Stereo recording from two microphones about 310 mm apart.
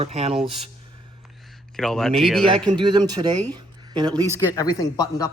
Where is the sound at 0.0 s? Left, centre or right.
Centre.